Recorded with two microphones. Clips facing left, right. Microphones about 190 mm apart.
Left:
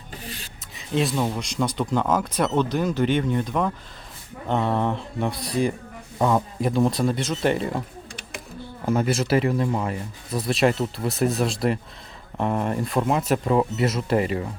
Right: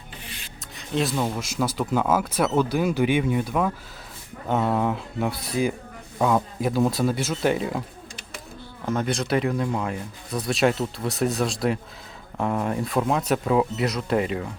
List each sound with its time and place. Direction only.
0.8 s speech: centre (ahead or behind)
8.9 s speech: 5° left (ahead or behind)